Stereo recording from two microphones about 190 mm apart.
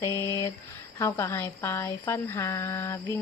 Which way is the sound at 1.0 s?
15° left (ahead or behind).